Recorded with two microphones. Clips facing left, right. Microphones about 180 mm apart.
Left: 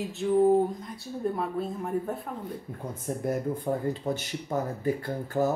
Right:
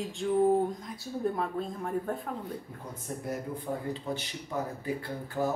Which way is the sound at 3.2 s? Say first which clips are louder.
Left 6 dB; 45° left (ahead or behind).